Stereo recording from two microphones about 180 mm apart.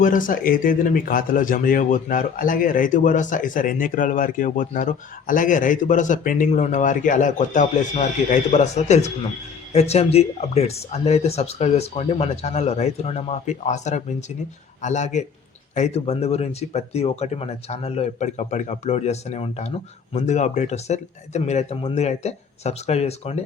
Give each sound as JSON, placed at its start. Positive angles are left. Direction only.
{"t": 0.0, "sound": "speech", "side_deg": 50}